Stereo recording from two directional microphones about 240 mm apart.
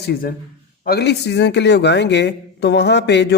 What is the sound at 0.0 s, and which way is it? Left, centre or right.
A man's voice, left.